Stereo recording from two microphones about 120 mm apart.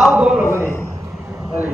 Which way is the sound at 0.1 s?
10° right (ahead or behind).